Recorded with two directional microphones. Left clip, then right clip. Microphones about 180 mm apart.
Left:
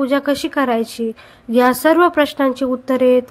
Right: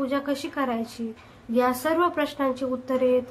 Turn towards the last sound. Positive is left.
turn(degrees=45)  # may be behind; listen again after turning